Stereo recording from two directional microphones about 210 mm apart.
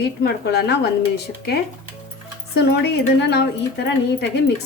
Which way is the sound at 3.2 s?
55° left (ahead or behind).